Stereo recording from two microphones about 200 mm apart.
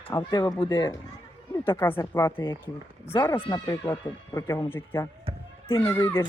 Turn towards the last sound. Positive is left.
turn(degrees=10)  # may be behind; listen again after turning